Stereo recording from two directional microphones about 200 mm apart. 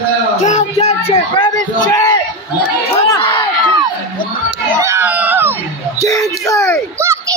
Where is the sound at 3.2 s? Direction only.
25° left (ahead or behind).